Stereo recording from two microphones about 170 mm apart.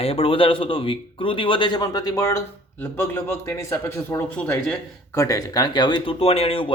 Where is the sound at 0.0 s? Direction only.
35° left (ahead or behind).